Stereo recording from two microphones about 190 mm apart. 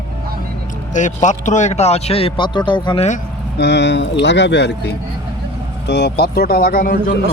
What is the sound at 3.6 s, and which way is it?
Speech, 65° left (ahead or behind).